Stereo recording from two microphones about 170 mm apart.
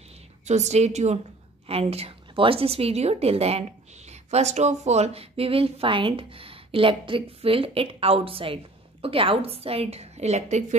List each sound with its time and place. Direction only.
0.5 s a woman's voice: 40° right (ahead or behind)